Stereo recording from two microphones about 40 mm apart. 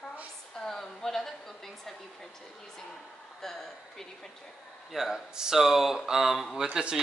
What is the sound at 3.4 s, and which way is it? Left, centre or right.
Speech, centre.